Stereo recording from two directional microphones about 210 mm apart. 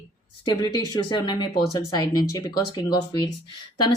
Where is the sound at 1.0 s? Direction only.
20° left (ahead or behind).